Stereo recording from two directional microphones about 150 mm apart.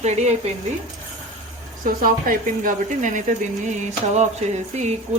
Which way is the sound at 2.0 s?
70° right (ahead or behind).